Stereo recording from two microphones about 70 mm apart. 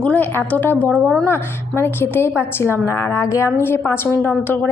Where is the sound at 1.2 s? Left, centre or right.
Left.